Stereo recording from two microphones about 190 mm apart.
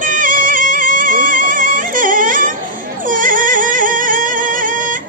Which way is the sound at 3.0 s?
45° right (ahead or behind).